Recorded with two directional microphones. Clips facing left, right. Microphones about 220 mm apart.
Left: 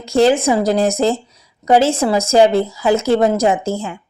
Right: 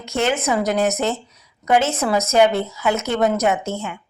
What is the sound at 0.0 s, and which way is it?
A woman's voice, 35° left (ahead or behind).